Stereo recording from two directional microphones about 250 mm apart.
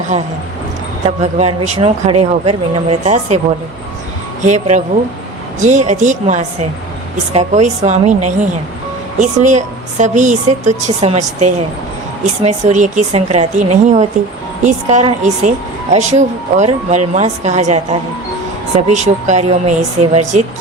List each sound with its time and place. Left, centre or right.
0.1 s a woman's voice: right
4.4 s a woman's voice: right
18.9 s a woman's voice: right